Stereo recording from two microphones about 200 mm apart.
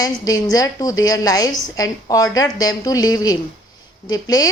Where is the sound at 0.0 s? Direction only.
20° left (ahead or behind).